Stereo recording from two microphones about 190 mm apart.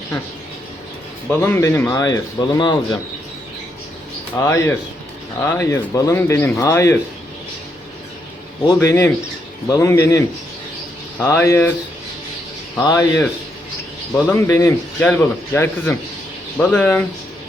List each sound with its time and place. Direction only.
1.3 s a man's voice: 10° left (ahead or behind)
4.4 s a man's voice: 15° left (ahead or behind)
8.6 s a man's voice: 15° left (ahead or behind)
12.7 s a man's voice: 20° left (ahead or behind)